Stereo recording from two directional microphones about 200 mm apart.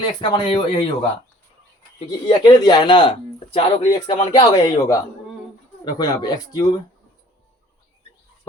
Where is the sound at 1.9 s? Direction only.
25° left (ahead or behind).